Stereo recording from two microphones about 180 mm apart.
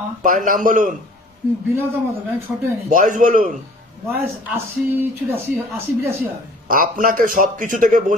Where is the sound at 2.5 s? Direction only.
5° right (ahead or behind).